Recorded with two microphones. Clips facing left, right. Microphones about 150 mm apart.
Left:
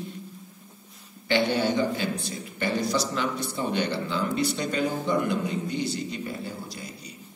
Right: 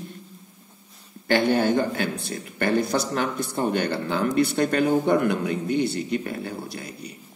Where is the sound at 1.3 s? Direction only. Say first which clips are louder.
Right 4 dB; 50° right (ahead or behind).